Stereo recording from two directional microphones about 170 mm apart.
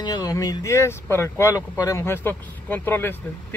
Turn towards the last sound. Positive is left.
turn(degrees=10)  # may be behind; listen again after turning